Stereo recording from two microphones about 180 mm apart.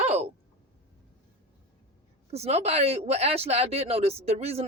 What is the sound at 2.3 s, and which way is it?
Speech, 35° right (ahead or behind).